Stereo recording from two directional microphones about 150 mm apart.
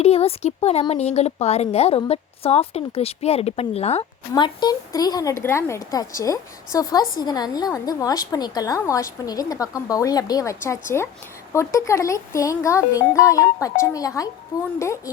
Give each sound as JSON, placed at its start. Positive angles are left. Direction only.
{"t": 0.0, "sound": "a woman's voice", "side_deg": 45}
{"t": 4.4, "sound": "a woman's voice", "side_deg": 30}